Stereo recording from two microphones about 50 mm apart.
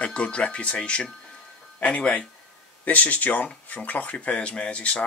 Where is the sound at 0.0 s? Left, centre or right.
Left.